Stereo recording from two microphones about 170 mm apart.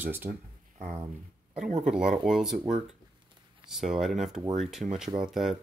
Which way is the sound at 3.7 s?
Centre (ahead or behind).